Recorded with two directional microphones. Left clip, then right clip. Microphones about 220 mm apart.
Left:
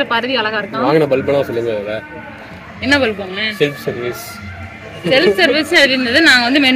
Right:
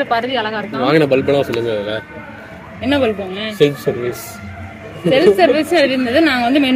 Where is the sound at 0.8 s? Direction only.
30° right (ahead or behind).